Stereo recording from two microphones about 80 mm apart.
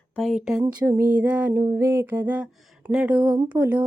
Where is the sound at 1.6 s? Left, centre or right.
Right.